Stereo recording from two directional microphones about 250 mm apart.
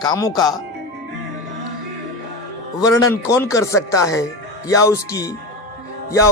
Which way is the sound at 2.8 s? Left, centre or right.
Centre.